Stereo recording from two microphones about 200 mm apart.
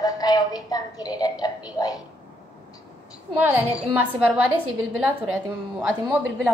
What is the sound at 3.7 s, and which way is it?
A woman's voice, 5° right (ahead or behind).